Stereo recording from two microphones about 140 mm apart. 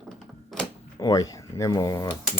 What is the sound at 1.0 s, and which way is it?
Speech, 25° left (ahead or behind).